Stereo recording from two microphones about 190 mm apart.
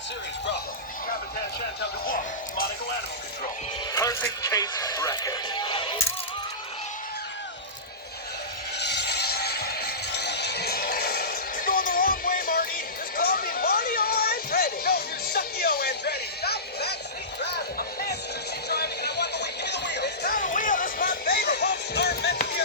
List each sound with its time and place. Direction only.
1.8 s music: 50° left (ahead or behind)
3.9 s speech: 15° left (ahead or behind)
8.8 s music: 60° left (ahead or behind)